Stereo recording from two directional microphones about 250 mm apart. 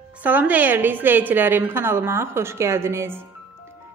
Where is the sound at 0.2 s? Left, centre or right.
Centre.